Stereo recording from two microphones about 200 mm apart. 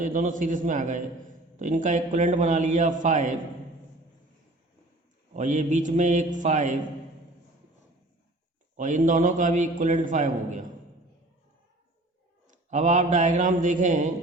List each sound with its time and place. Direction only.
0.0 s a man's voice: 40° right (ahead or behind)
5.3 s a man's voice: 40° right (ahead or behind)
8.7 s a man's voice: 40° right (ahead or behind)
12.5 s a man's voice: 35° right (ahead or behind)